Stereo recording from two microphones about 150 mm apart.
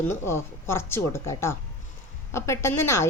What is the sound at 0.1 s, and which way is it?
A woman's voice, 15° left (ahead or behind).